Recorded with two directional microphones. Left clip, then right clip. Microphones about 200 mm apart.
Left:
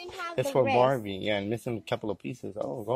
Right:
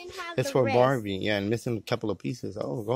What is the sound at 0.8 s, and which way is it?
Speech, 50° right (ahead or behind).